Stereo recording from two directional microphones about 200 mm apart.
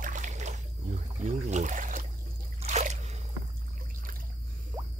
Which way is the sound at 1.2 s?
35° right (ahead or behind).